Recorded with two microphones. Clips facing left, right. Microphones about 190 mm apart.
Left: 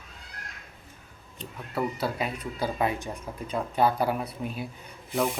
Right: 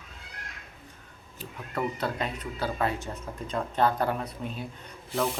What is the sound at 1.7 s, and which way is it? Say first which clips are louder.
Speech: left 1 dB; 10° left (ahead or behind).